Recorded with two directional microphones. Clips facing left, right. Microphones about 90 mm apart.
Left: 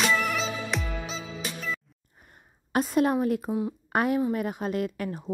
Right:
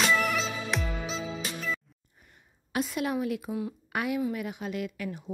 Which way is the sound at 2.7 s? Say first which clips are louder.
Left 6 dB; 40° left (ahead or behind).